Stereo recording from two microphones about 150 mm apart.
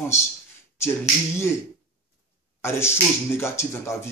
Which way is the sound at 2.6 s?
15° left (ahead or behind).